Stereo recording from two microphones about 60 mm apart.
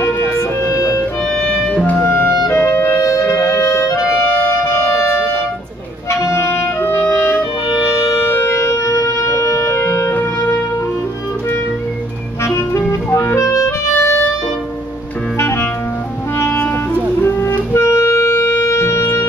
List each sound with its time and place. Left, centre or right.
0.4 s music: left
1.5 s music: centre
2.0 s music: left
2.5 s clarinet: left
3.2 s music: left
6.0 s clarinet: left
7.8 s wind instrument: left
10.1 s music: left
12.4 s music: left
13.4 s clarinet: left
15.3 s clarinet: left
16.3 s music: left
17.2 s music: left